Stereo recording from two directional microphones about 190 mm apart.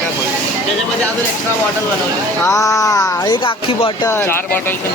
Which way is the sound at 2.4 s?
15° left (ahead or behind).